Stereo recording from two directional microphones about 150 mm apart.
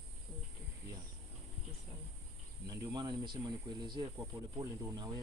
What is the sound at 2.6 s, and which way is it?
Speech, 25° right (ahead or behind).